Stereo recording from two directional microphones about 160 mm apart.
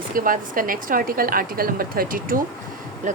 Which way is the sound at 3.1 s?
50° right (ahead or behind).